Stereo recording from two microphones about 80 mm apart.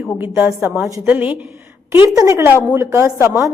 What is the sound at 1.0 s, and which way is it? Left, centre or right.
Speech, right.